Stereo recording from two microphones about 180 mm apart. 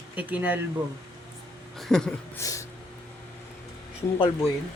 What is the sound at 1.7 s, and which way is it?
Speech, 5° left (ahead or behind).